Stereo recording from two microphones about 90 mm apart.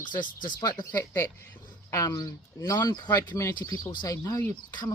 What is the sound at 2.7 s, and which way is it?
Speech, 55° left (ahead or behind).